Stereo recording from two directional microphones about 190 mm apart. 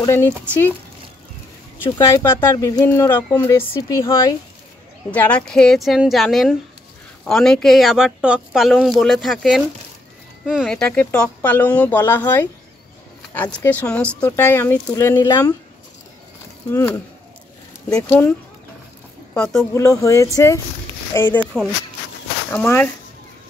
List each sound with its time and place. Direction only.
0.0 s speech: 15° left (ahead or behind)
1.9 s speech: 20° left (ahead or behind)
16.7 s speech: 15° left (ahead or behind)
19.3 s speech: 10° left (ahead or behind)
22.5 s speech: 10° left (ahead or behind)